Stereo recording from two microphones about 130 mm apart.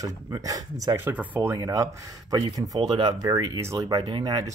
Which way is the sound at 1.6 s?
30° right (ahead or behind).